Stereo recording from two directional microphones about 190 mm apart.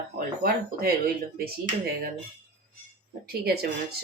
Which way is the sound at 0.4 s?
50° right (ahead or behind).